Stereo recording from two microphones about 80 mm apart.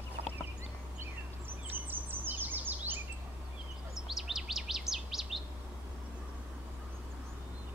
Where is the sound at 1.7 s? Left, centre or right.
Right.